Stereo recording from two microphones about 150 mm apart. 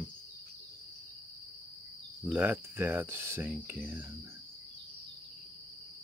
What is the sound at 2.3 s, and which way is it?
Speech, 10° right (ahead or behind).